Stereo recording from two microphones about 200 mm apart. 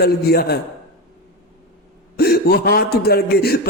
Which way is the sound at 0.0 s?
50° left (ahead or behind).